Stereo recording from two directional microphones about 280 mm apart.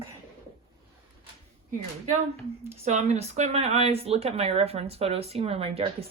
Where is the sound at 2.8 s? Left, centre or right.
Right.